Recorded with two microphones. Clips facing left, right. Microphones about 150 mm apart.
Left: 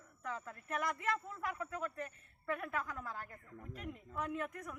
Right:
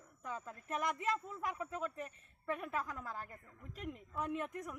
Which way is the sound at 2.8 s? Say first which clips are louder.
Even; centre (ahead or behind).